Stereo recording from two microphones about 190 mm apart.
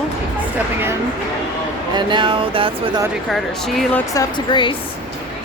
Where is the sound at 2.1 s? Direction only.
25° right (ahead or behind).